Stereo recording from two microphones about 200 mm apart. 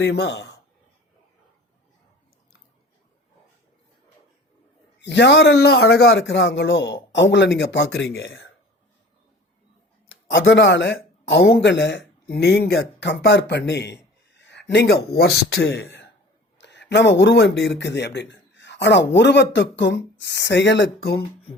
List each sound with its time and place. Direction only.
0.0 s speech: 55° left (ahead or behind)
4.9 s speech: 60° left (ahead or behind)
10.3 s speech: 65° left (ahead or behind)